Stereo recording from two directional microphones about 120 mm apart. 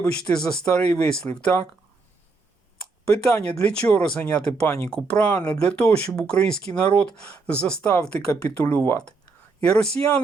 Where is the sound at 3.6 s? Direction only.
10° left (ahead or behind).